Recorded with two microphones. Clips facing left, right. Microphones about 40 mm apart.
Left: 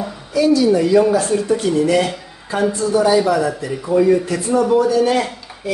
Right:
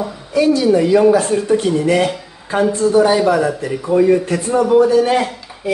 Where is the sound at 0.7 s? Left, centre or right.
Right.